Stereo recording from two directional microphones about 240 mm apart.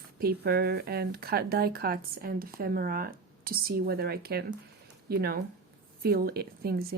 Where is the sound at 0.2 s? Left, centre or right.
Right.